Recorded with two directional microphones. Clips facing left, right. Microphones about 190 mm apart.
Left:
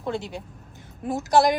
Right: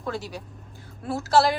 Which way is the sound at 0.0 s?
25° left (ahead or behind).